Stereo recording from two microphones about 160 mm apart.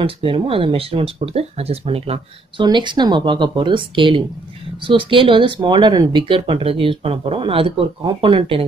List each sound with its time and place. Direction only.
0.0 s speech: 35° right (ahead or behind)